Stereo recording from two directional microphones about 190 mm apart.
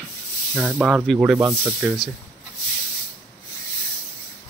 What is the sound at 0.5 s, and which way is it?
Speech, 5° right (ahead or behind).